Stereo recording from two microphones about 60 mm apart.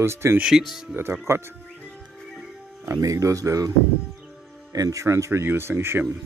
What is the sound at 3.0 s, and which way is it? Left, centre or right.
Speech, right.